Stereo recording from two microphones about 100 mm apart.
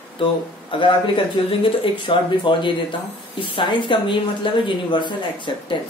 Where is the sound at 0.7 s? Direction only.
55° left (ahead or behind).